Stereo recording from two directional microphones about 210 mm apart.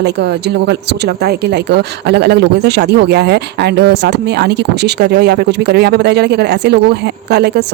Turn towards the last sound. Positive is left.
turn(degrees=-50)  # may be behind; listen again after turning